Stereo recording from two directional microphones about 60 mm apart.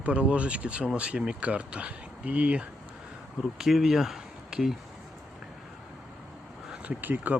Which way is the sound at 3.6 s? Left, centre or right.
Centre.